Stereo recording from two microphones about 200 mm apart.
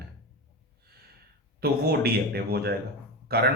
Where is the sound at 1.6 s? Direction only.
50° right (ahead or behind).